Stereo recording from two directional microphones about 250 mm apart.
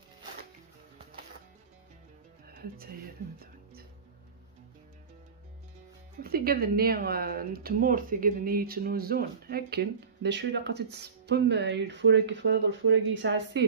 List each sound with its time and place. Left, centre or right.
2.4 s music: right
6.2 s speech: right